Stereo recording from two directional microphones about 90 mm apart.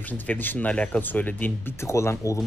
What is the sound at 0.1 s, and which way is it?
Speech, 20° left (ahead or behind).